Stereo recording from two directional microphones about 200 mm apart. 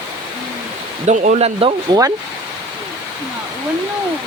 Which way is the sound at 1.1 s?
35° right (ahead or behind).